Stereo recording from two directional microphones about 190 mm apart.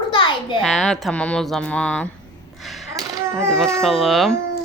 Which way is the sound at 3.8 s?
Centre (ahead or behind).